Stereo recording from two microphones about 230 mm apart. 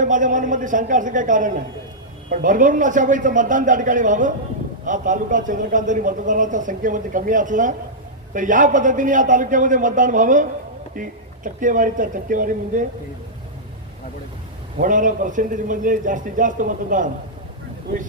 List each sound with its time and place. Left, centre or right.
0.0 s a man's voice: right
14.8 s a man's voice: right